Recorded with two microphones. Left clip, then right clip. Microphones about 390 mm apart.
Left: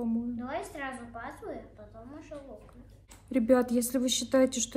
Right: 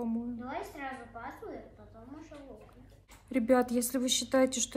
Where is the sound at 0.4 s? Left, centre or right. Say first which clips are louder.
Left 3 dB; left.